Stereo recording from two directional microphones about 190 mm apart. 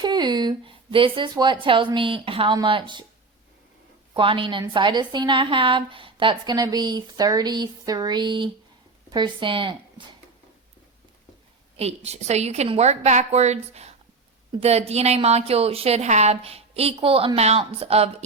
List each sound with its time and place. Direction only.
0.0 s a woman's voice: 20° right (ahead or behind)
4.1 s a woman's voice: 25° right (ahead or behind)
11.8 s a woman's voice: 35° right (ahead or behind)